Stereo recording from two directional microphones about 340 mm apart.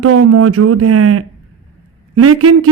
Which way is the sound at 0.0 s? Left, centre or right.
Right.